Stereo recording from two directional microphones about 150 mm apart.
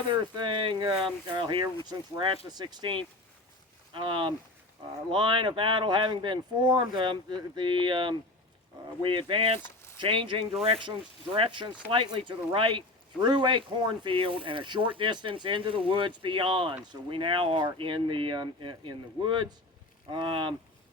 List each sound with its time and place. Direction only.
0.1 s speech: 30° right (ahead or behind)
9.6 s a sound: 15° left (ahead or behind)
10.0 s speech: 35° right (ahead or behind)